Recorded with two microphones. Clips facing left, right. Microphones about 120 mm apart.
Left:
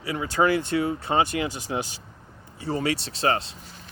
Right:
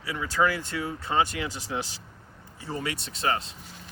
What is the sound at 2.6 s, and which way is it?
Speech, 70° left (ahead or behind).